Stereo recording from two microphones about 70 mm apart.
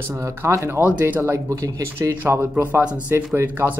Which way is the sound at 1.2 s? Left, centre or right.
Right.